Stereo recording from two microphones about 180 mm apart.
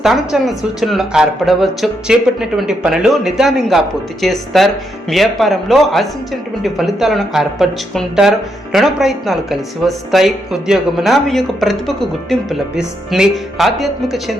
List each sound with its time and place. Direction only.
0.0 s speech: centre (ahead or behind)